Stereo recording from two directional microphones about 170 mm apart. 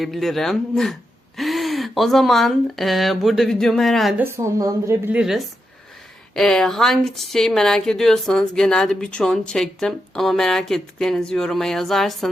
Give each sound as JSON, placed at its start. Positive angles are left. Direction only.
{"t": 0.0, "sound": "speech", "side_deg": 0}
{"t": 4.2, "sound": "a woman's voice", "side_deg": -15}
{"t": 5.1, "sound": "speech", "side_deg": 0}